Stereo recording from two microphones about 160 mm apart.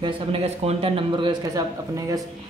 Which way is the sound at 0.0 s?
40° right (ahead or behind).